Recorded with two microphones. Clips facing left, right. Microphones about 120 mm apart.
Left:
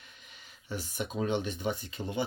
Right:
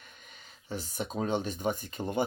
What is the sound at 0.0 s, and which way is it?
Speech, 45° right (ahead or behind).